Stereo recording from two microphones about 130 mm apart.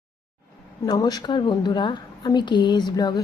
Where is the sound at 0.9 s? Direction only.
30° left (ahead or behind).